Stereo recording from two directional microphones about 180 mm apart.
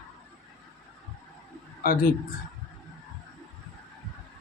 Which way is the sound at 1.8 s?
55° left (ahead or behind).